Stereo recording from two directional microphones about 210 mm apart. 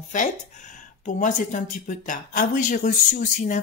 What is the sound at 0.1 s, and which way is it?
A woman's voice, 35° left (ahead or behind).